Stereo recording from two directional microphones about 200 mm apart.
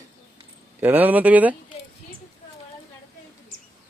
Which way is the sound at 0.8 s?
10° right (ahead or behind).